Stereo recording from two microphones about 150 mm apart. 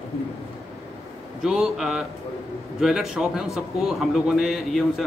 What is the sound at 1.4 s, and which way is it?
A man's voice, 5° right (ahead or behind).